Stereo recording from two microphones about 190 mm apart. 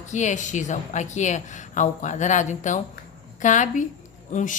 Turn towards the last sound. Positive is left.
turn(degrees=40)  # may be behind; listen again after turning